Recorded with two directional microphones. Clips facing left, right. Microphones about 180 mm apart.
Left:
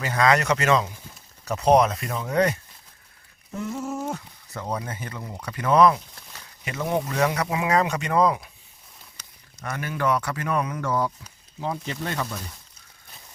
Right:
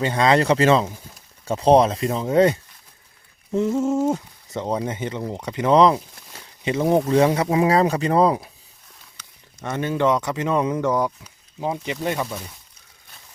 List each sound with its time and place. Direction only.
0.0 s speech: 25° right (ahead or behind)
9.6 s speech: 25° right (ahead or behind)